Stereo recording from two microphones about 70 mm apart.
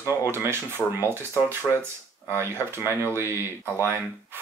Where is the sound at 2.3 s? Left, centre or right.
Right.